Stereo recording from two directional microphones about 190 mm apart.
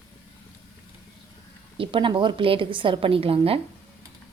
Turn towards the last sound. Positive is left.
turn(degrees=-30)  # may be behind; listen again after turning